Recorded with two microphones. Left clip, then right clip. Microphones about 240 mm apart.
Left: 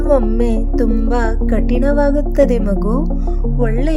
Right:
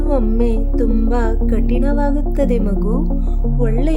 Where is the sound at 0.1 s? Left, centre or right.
Centre.